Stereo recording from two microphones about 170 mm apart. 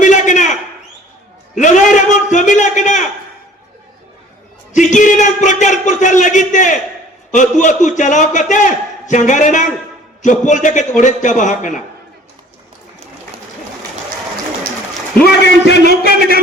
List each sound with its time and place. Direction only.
0.0 s a sound: 45° left (ahead or behind)
1.5 s a man's voice: 45° left (ahead or behind)
4.7 s a man's voice: 45° left (ahead or behind)
15.2 s a man's voice: 80° left